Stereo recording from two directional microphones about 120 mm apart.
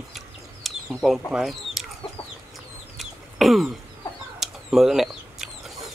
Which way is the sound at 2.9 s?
Centre (ahead or behind).